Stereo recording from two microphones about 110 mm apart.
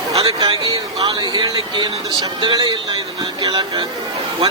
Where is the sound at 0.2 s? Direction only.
40° right (ahead or behind).